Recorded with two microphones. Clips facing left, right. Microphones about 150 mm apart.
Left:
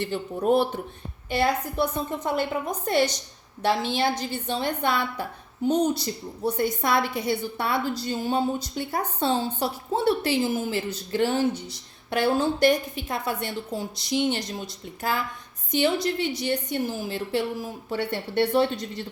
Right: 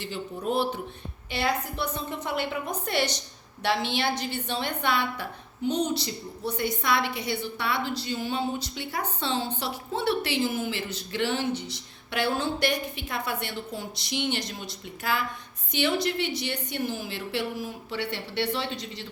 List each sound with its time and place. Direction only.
0.4 s a woman's voice: 55° left (ahead or behind)
15.7 s a woman's voice: 45° left (ahead or behind)